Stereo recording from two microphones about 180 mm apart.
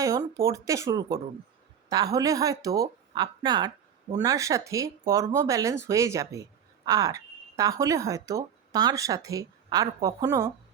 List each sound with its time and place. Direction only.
0.0 s speech: 15° right (ahead or behind)